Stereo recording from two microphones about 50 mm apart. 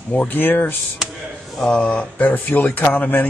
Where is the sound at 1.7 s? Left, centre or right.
Left.